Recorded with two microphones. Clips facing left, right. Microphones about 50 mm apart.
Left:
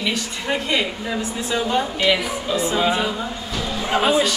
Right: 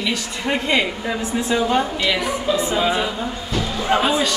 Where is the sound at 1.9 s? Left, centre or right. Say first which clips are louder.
Left 1 dB; centre.